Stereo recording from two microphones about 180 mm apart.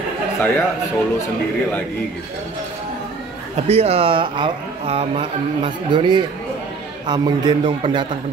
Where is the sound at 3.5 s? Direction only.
35° right (ahead or behind).